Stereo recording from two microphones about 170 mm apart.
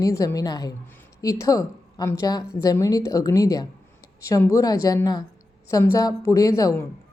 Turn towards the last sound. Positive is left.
turn(degrees=20)  # may be behind; listen again after turning